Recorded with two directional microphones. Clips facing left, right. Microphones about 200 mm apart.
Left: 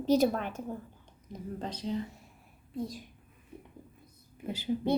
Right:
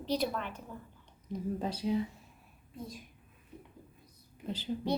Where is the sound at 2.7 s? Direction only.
75° left (ahead or behind).